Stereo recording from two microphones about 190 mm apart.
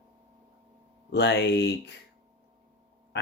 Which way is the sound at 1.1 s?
65° left (ahead or behind).